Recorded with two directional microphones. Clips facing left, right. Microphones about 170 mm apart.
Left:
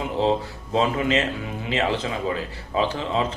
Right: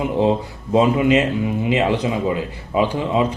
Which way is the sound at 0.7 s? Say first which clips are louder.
Right 7 dB; 15° right (ahead or behind).